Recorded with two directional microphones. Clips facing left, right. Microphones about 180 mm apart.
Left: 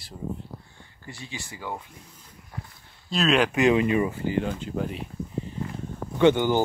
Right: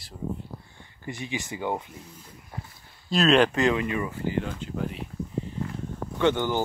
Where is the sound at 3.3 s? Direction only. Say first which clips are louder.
Right 2 dB; 10° left (ahead or behind).